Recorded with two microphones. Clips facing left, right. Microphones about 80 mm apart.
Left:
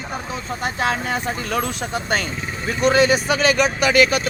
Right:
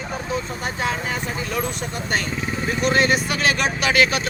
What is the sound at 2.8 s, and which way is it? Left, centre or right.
Speech, left.